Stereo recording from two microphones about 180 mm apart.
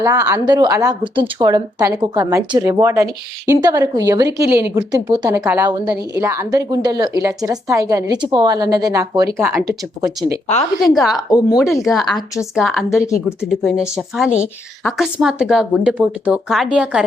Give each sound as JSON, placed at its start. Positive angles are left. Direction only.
{"t": 0.0, "sound": "a woman's voice", "side_deg": -15}
{"t": 11.1, "sound": "speech", "side_deg": 20}
{"t": 11.5, "sound": "speech", "side_deg": 0}